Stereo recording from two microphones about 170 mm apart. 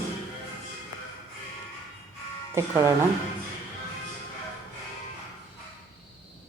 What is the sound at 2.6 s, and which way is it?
Speech, 15° right (ahead or behind).